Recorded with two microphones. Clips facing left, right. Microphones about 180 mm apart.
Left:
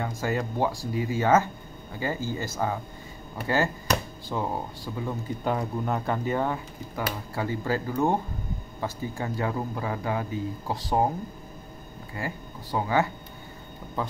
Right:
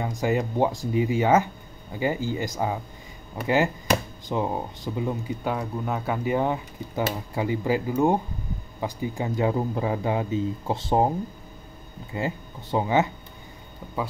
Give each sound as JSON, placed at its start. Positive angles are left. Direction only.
{"t": 0.0, "sound": "speech", "side_deg": -15}
{"t": 5.4, "sound": "speech", "side_deg": -5}
{"t": 12.1, "sound": "speech", "side_deg": -20}